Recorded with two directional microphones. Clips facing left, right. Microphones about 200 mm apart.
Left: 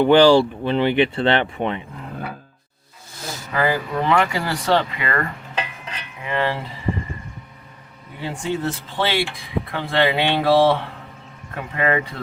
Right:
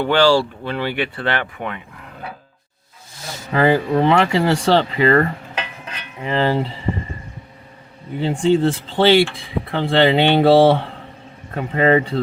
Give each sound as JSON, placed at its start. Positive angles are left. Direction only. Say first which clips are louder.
{"t": 0.0, "sound": "speech", "louder": "left 3 dB", "side_deg": 15}
{"t": 3.5, "sound": "speech", "louder": "right 6 dB", "side_deg": -30}
{"t": 8.2, "sound": "speech", "louder": "right 9 dB", "side_deg": -25}